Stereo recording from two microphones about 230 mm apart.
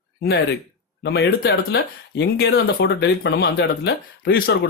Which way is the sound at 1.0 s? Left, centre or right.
Left.